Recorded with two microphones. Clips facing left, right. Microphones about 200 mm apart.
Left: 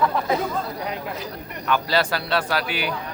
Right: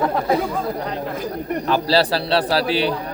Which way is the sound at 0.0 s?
40° right (ahead or behind).